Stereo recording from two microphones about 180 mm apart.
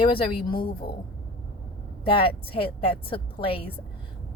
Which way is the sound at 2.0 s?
30° left (ahead or behind).